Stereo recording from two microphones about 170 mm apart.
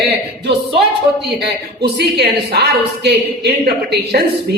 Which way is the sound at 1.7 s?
70° right (ahead or behind).